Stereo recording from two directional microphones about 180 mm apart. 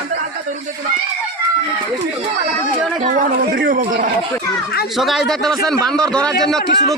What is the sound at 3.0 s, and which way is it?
Speech, 45° right (ahead or behind).